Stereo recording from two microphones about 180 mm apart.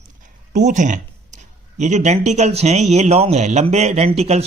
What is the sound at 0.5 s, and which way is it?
Speech, 45° right (ahead or behind).